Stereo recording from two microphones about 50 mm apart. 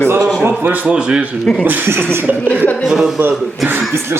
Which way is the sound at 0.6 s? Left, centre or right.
Right.